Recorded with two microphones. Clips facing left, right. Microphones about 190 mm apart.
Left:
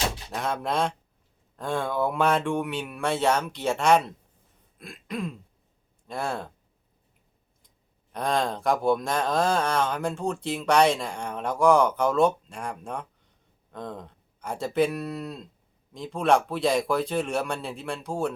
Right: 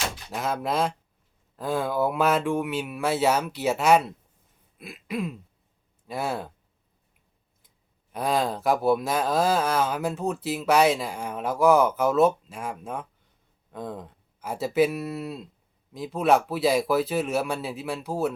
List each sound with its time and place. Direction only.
0.3 s speech: 5° right (ahead or behind)
4.8 s throat clearing: 5° right (ahead or behind)
6.1 s speech: 5° right (ahead or behind)
8.1 s speech: 5° right (ahead or behind)